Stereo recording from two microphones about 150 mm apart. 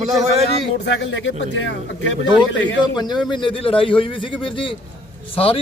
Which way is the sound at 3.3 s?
35° left (ahead or behind).